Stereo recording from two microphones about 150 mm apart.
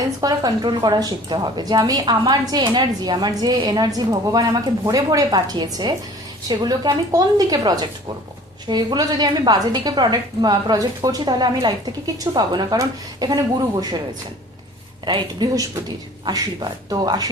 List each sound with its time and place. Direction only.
0.2 s a woman's voice: 25° right (ahead or behind)
15.0 s a woman's voice: 30° right (ahead or behind)
16.9 s a woman's voice: 25° right (ahead or behind)